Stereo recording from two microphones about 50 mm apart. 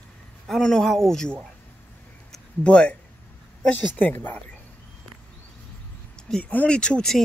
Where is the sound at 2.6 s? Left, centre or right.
Left.